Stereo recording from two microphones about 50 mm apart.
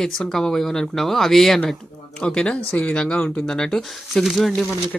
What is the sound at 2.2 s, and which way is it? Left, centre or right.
Speech, left.